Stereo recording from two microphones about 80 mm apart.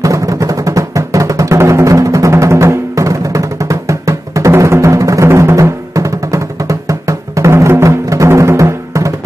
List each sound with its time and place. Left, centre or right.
0.0 s music: right